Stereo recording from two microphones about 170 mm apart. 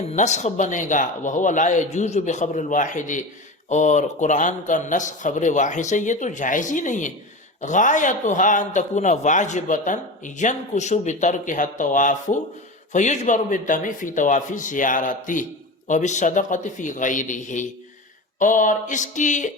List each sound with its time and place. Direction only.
0.1 s a man's voice: 45° left (ahead or behind)